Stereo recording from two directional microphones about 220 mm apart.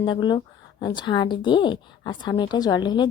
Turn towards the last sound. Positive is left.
turn(degrees=20)  # may be behind; listen again after turning